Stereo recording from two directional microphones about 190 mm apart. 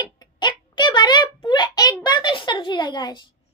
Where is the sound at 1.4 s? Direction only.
25° left (ahead or behind).